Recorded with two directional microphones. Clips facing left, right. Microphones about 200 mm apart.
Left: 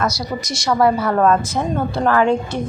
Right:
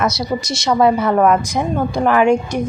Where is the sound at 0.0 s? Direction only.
25° right (ahead or behind).